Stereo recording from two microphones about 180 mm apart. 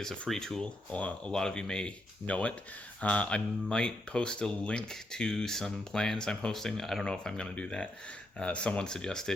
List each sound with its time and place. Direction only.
0.0 s speech: centre (ahead or behind)